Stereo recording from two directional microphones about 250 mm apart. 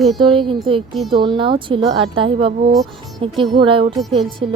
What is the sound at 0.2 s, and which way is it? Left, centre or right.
A woman's voice, centre.